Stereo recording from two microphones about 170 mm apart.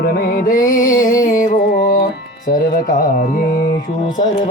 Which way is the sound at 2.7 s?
50° left (ahead or behind).